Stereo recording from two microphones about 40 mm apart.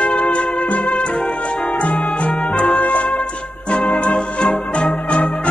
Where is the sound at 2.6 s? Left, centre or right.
Left.